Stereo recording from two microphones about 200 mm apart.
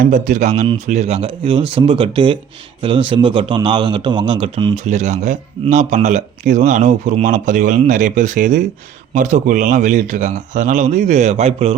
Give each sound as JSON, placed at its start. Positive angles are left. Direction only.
{"t": 0.0, "sound": "speech", "side_deg": -40}